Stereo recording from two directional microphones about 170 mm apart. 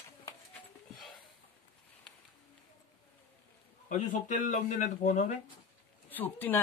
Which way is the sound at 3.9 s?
45° left (ahead or behind).